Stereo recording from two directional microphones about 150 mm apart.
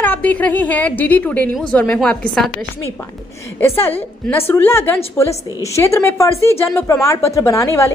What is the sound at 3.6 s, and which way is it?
A woman's voice, 15° left (ahead or behind).